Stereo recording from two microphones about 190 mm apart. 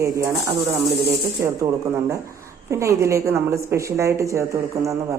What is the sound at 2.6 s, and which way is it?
Speech, 15° right (ahead or behind).